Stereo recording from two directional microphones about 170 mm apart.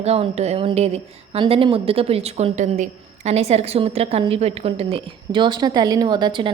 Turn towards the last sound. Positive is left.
turn(degrees=-25)  # may be behind; listen again after turning